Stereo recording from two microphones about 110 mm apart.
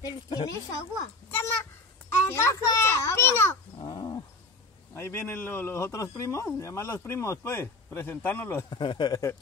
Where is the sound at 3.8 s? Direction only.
40° left (ahead or behind).